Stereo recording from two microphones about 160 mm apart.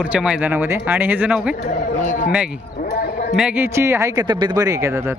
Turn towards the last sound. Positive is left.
turn(degrees=-20)  # may be behind; listen again after turning